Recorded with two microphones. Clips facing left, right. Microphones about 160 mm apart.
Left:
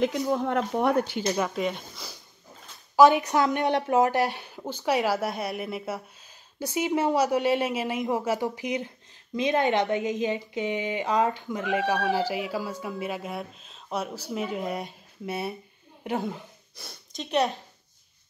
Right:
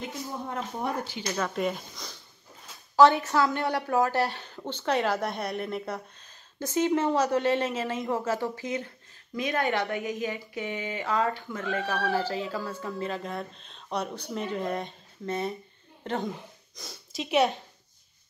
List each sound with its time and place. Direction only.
0.0 s speech: 85° left; by 1.2 s 65° left (ahead or behind)
1.2 s speech: 15° left (ahead or behind)
1.5 s speech: centre (ahead or behind)
3.0 s speech: 15° left (ahead or behind)
16.7 s speech: centre (ahead or behind)